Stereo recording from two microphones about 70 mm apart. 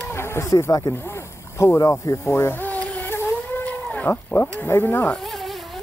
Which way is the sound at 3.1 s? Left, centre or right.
Left.